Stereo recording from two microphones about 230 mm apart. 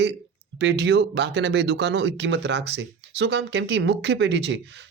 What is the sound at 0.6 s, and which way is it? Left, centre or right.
Speech, right.